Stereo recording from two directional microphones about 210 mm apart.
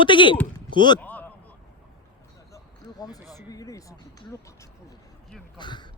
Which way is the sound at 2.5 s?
20° left (ahead or behind).